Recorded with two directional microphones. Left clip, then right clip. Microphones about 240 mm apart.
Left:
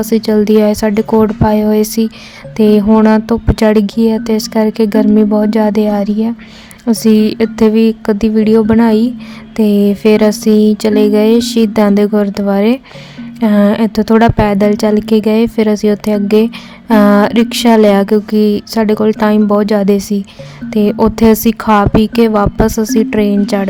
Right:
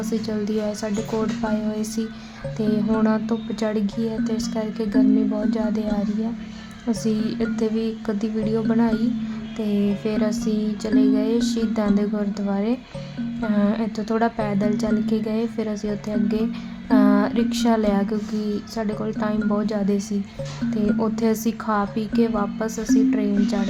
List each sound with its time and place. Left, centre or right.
0.0 s speech: left